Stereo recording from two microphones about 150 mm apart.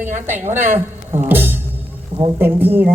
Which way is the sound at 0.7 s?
15° right (ahead or behind).